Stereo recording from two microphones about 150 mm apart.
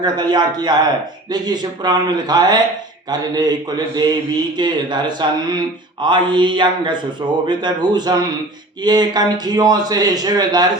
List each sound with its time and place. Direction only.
0.0 s speech: 30° right (ahead or behind)